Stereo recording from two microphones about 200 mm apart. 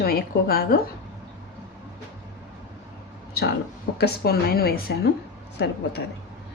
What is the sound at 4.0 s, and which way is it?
A woman's voice, 50° left (ahead or behind).